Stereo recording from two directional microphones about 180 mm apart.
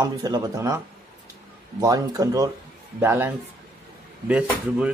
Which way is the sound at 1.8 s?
20° right (ahead or behind).